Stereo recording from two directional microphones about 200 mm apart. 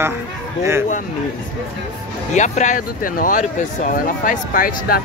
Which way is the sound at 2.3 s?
35° left (ahead or behind).